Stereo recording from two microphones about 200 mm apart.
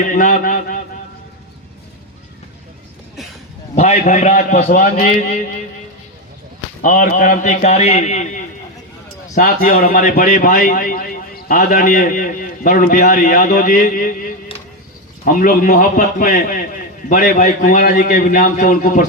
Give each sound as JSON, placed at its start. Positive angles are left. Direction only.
{"t": 0.1, "sound": "a man's voice", "side_deg": 40}
{"t": 3.8, "sound": "a man's voice", "side_deg": 35}
{"t": 6.8, "sound": "a man's voice", "side_deg": 40}